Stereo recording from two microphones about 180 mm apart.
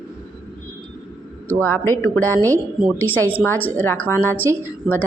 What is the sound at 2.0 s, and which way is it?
Speech, 10° left (ahead or behind).